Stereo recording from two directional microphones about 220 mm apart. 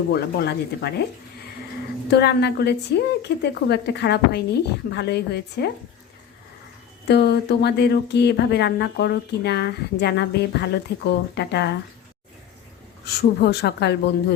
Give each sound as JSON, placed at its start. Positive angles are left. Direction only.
{"t": 0.1, "sound": "speech", "side_deg": 45}
{"t": 2.0, "sound": "speech", "side_deg": 50}
{"t": 7.1, "sound": "speech", "side_deg": 50}
{"t": 13.1, "sound": "speech", "side_deg": 50}